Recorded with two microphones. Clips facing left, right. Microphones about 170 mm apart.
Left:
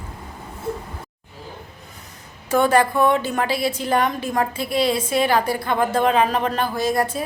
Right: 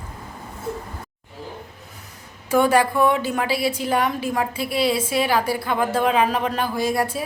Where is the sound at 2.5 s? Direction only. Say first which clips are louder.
Even; 10° right (ahead or behind).